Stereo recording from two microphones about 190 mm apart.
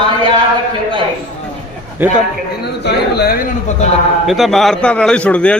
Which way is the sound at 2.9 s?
55° left (ahead or behind).